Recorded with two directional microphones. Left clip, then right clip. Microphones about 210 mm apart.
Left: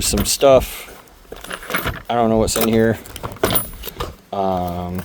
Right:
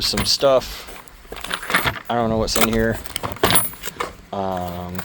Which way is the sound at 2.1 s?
35° left (ahead or behind).